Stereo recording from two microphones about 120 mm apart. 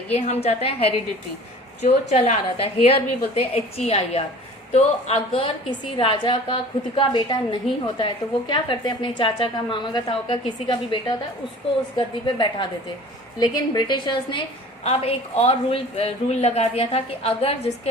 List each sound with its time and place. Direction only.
0.1 s speech: 60° left (ahead or behind)
1.8 s a woman's voice: 65° left (ahead or behind); by 14.4 s 45° left (ahead or behind)
14.8 s speech: 60° left (ahead or behind)